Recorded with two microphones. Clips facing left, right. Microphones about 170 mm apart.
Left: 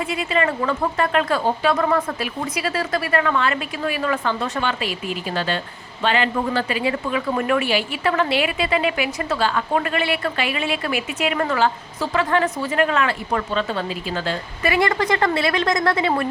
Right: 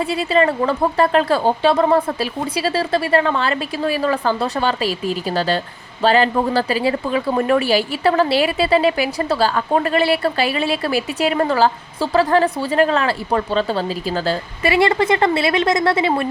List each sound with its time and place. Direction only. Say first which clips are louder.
0.1 s a woman's voice: right 5 dB; 35° right (ahead or behind)